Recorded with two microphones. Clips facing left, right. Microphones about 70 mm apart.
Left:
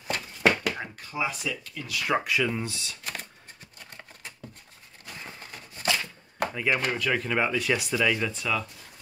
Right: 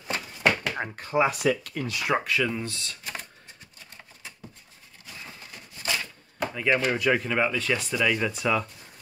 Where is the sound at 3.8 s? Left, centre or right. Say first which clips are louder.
Left 2 dB; left.